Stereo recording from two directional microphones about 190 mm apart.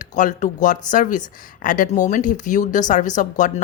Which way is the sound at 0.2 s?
40° left (ahead or behind).